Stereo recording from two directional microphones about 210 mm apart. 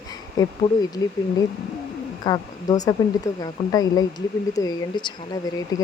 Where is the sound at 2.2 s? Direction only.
20° left (ahead or behind).